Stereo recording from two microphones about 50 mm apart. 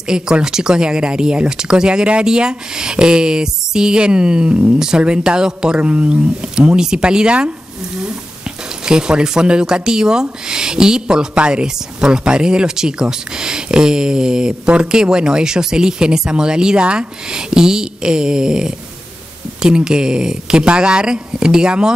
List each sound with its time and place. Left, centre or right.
0.1 s speech: centre
8.8 s speech: centre